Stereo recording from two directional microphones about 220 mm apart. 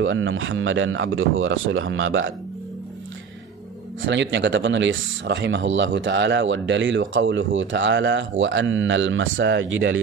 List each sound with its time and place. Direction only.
0.0 s speech: 60° right (ahead or behind)
4.0 s speech: 55° right (ahead or behind)